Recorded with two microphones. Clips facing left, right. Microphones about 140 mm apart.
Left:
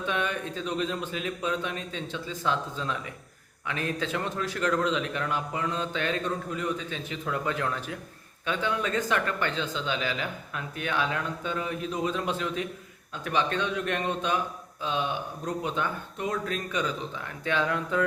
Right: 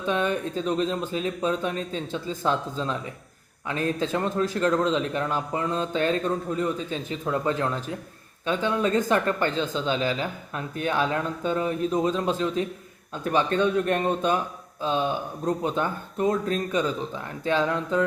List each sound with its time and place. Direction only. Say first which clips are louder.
0.0 s a man's voice: right 5 dB; 35° right (ahead or behind)